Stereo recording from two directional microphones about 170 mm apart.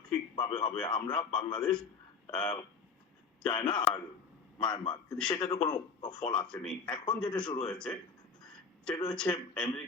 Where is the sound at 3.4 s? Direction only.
30° left (ahead or behind).